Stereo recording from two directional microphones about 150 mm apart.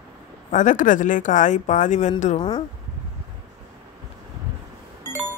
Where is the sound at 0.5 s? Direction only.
60° left (ahead or behind).